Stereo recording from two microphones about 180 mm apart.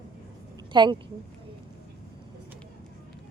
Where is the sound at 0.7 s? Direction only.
25° right (ahead or behind).